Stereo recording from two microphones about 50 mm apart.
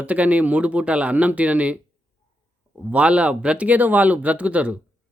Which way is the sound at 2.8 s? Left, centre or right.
Right.